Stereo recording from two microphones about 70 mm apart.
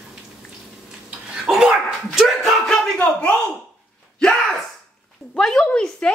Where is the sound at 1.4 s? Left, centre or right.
Centre.